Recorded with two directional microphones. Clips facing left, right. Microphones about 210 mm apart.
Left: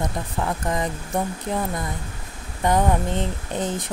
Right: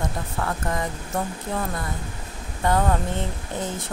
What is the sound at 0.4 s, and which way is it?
Speech, 20° left (ahead or behind).